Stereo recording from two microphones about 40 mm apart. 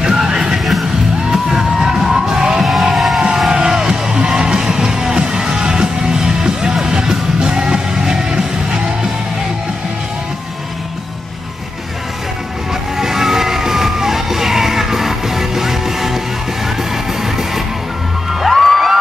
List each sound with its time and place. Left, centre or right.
0.0 s music: centre
2.6 s music: centre
3.4 s music: centre
12.9 s music: centre
17.2 s music: centre
18.5 s music: centre